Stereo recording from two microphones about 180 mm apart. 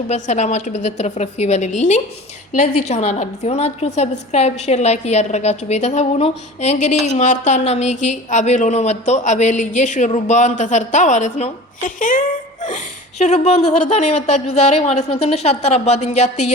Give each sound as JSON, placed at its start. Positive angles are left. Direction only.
{"t": 0.1, "sound": "speech", "side_deg": 40}